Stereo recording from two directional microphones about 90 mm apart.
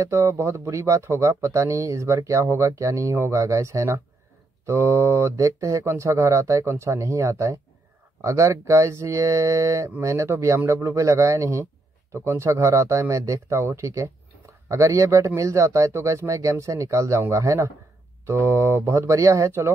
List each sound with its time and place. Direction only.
0.0 s speech: 35° right (ahead or behind)